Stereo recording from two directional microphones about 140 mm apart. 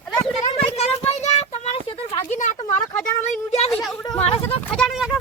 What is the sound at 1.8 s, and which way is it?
A woman's voice, 40° left (ahead or behind).